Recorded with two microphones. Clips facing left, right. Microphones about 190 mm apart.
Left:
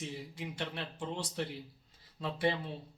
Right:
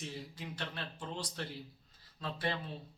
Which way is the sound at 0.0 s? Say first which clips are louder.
Left 3 dB; 15° left (ahead or behind).